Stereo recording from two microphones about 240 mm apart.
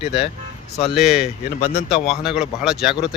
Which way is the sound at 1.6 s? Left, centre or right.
Left.